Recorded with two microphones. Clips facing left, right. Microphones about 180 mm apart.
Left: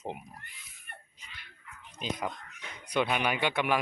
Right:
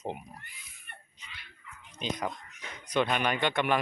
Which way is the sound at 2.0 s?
5° left (ahead or behind).